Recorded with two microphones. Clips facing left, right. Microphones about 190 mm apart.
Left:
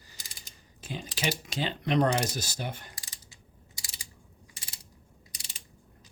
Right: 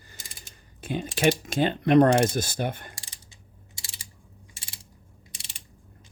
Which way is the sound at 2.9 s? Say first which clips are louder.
Right 2 dB; 25° right (ahead or behind).